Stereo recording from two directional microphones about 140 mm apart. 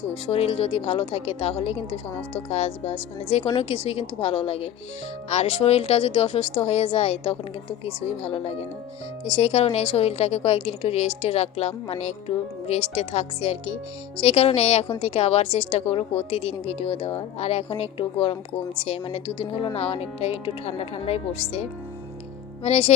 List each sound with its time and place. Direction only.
0.1 s a woman's voice: 45° left (ahead or behind)